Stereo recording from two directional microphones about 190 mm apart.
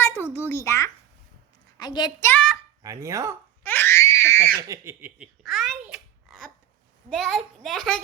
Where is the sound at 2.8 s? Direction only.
15° right (ahead or behind).